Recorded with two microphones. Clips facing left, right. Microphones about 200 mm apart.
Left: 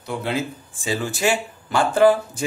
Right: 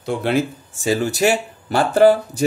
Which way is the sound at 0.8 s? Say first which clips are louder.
Right 5 dB; 40° right (ahead or behind).